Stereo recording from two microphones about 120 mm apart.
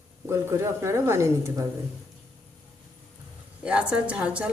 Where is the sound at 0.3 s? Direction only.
25° right (ahead or behind).